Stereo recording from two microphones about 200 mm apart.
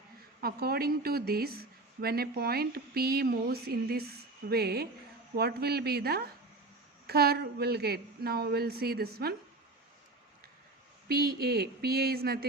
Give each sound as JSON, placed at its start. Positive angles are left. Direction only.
{"t": 0.4, "sound": "speech", "side_deg": -50}
{"t": 11.1, "sound": "speech", "side_deg": -50}